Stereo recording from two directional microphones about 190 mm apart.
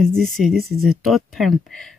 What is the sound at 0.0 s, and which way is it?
Speech, centre (ahead or behind).